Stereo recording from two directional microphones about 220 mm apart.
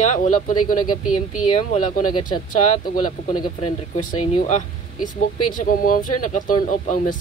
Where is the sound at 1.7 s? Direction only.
35° left (ahead or behind).